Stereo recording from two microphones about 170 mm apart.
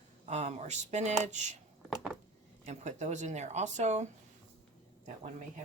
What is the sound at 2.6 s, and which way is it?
Speech, 45° right (ahead or behind).